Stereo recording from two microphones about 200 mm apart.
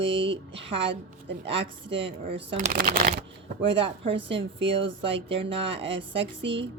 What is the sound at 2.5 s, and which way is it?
Speech, 40° right (ahead or behind).